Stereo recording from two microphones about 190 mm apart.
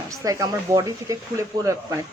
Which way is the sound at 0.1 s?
15° right (ahead or behind).